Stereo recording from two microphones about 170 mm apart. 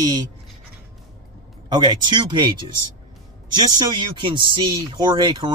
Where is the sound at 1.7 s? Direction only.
25° right (ahead or behind).